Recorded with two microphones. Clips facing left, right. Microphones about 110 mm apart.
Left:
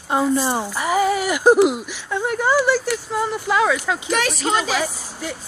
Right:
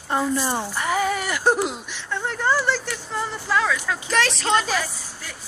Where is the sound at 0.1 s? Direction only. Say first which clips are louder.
Left 4 dB; 15° left (ahead or behind).